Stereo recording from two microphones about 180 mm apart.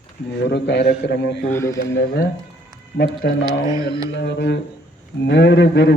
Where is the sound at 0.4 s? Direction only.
70° left (ahead or behind).